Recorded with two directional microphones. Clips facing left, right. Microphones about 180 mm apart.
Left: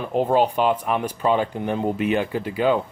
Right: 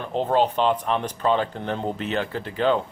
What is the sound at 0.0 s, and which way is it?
Speech, 10° left (ahead or behind).